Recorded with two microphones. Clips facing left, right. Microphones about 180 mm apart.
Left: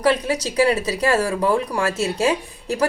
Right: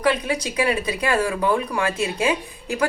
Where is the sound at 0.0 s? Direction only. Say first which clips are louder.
Left 2 dB; 35° left (ahead or behind).